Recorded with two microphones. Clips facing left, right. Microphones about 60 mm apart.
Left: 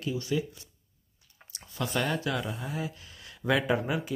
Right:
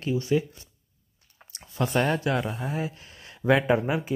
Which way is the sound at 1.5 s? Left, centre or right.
Right.